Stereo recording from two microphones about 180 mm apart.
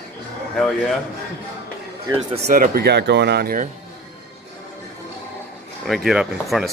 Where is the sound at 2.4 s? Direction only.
55° right (ahead or behind).